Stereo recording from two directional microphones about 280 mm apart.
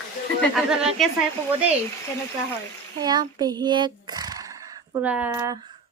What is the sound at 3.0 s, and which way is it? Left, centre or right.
Speech, centre.